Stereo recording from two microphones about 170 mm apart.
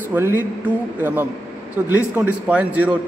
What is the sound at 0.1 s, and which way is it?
Speech, 15° right (ahead or behind).